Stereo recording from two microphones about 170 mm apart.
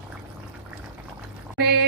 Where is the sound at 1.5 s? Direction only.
70° right (ahead or behind).